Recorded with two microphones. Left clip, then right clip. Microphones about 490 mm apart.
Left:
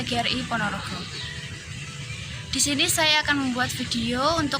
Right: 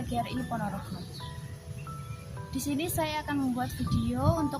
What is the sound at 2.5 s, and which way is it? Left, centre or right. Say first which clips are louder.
A woman's voice: left 10 dB; right.